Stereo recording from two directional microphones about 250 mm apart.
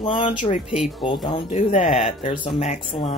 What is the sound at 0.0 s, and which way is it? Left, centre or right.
Speech, centre.